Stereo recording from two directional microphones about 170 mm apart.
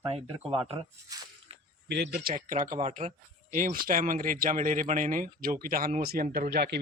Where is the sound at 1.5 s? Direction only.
35° right (ahead or behind).